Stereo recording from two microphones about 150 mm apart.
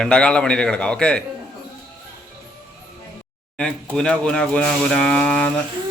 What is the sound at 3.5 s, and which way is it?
Speech, 5° left (ahead or behind).